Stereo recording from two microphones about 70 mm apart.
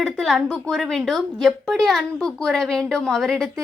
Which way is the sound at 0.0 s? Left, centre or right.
Centre.